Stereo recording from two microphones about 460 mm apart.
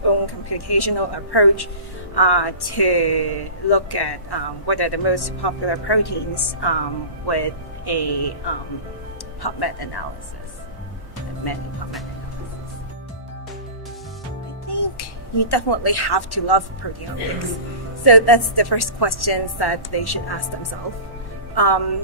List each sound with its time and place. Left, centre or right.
0.0 s speech: left
14.7 s speech: left
18.0 s speech: left